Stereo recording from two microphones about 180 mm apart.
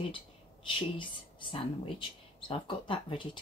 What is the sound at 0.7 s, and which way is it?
Speech, 30° left (ahead or behind).